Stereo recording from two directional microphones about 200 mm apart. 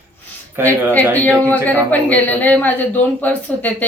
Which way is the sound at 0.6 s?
10° left (ahead or behind).